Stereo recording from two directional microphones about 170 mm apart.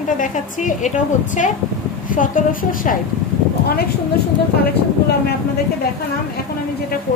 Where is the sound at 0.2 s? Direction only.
45° left (ahead or behind).